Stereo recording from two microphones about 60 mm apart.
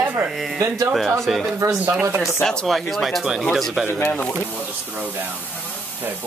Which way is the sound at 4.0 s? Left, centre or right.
Left.